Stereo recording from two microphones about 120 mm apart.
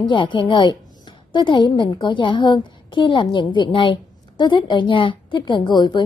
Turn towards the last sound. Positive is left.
turn(degrees=35)  # may be behind; listen again after turning